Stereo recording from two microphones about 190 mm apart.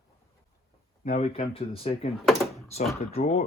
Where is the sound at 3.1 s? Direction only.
35° left (ahead or behind).